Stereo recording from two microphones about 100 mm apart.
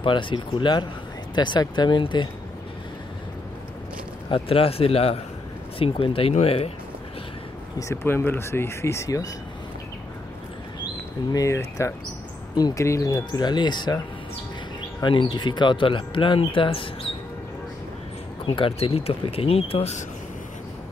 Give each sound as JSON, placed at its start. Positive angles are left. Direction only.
{"t": 0.0, "sound": "speech", "side_deg": 55}
{"t": 4.3, "sound": "speech", "side_deg": 70}
{"t": 7.9, "sound": "speech", "side_deg": 20}
{"t": 11.3, "sound": "speech", "side_deg": 30}
{"t": 15.0, "sound": "speech", "side_deg": 50}
{"t": 18.4, "sound": "speech", "side_deg": 60}